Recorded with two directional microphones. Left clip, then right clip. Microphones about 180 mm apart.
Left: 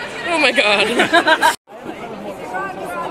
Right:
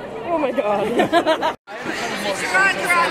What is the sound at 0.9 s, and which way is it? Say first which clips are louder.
Speech: left 4 dB; 15° right (ahead or behind).